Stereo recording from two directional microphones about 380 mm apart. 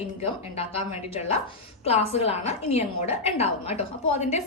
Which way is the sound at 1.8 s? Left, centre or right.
Centre.